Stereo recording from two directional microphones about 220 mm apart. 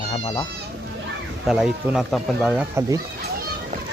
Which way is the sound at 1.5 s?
Centre (ahead or behind).